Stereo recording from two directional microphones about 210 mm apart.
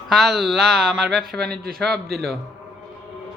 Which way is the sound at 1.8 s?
Centre (ahead or behind).